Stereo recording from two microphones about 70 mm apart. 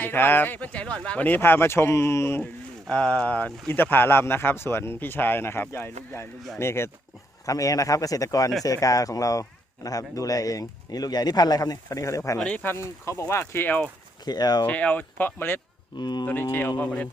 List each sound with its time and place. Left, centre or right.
0.0 s speech: left
2.8 s speech: centre; by 6.9 s left
7.4 s speech: left
13.7 s speech: left
14.3 s speech: left
14.7 s speech: left
16.0 s speech: left
16.2 s speech: left
16.7 s speech: left